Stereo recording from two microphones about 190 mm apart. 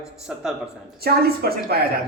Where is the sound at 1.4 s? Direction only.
55° right (ahead or behind).